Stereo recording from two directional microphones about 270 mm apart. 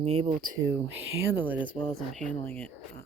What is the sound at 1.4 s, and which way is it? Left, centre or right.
Speech, centre.